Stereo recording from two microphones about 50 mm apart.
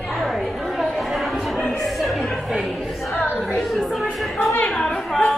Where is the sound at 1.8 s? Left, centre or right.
Centre.